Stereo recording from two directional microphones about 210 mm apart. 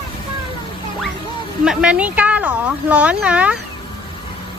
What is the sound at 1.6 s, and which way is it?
Speech, 5° right (ahead or behind).